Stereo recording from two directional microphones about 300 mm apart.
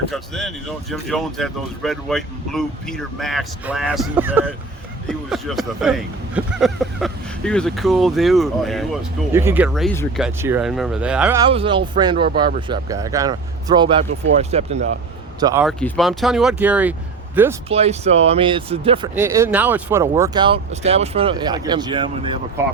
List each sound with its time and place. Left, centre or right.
0.1 s speech: centre
15.6 s speech: centre
17.7 s speech: centre